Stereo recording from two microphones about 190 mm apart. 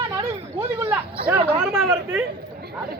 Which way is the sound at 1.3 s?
10° right (ahead or behind).